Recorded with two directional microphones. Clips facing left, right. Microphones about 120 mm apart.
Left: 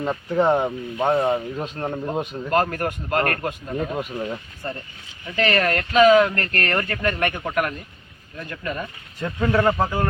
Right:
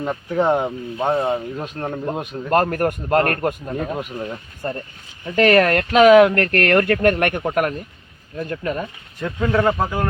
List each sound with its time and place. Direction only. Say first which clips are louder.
0.0 s speech: even; centre (ahead or behind)
2.5 s a man's voice: right 4 dB; 50° right (ahead or behind)
3.8 s speech: right 1 dB; centre (ahead or behind)
5.4 s speech: right 6 dB; 60° right (ahead or behind)
8.4 s speech: right 6 dB; 35° right (ahead or behind)
9.2 s speech: right 1 dB; centre (ahead or behind)